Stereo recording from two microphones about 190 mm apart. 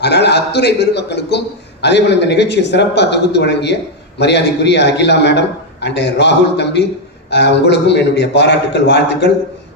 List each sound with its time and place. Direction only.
0.0 s a man's voice: 60° left (ahead or behind)